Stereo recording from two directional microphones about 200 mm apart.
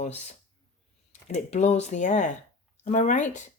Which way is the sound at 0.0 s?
35° left (ahead or behind).